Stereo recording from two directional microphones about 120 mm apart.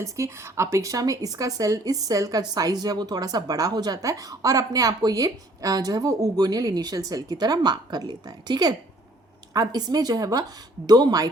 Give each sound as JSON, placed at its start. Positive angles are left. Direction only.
{"t": 0.0, "sound": "a woman's voice", "side_deg": -25}